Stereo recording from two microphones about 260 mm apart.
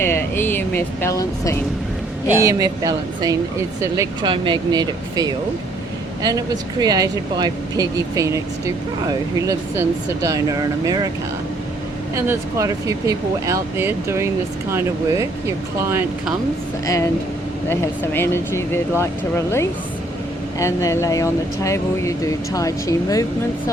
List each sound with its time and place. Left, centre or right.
0.0 s speech: centre
2.4 s speech: centre
12.1 s speech: centre
16.8 s speech: centre
20.6 s speech: centre